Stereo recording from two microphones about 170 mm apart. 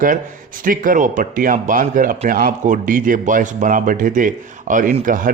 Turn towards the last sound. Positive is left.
turn(degrees=-50)  # may be behind; listen again after turning